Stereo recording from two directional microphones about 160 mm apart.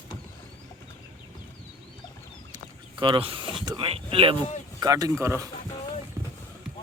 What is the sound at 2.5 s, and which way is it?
Speech, 30° right (ahead or behind).